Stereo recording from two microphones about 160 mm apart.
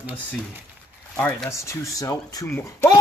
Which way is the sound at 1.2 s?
10° left (ahead or behind).